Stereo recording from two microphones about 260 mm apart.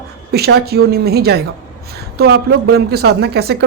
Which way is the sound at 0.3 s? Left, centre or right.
Right.